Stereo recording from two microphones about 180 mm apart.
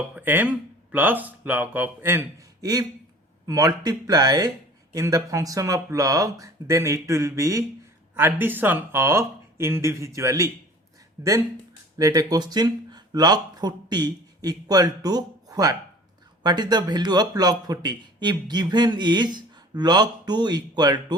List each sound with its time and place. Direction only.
0.1 s a man's voice: 10° right (ahead or behind)